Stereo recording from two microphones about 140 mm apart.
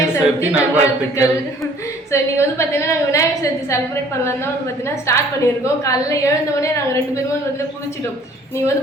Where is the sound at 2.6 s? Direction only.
20° left (ahead or behind).